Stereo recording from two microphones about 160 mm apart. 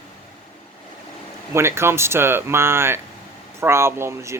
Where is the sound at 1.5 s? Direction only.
15° right (ahead or behind).